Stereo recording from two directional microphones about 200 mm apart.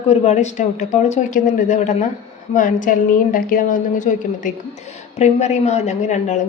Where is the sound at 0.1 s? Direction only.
35° left (ahead or behind).